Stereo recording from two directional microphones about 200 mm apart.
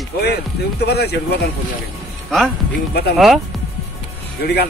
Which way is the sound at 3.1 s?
Centre (ahead or behind).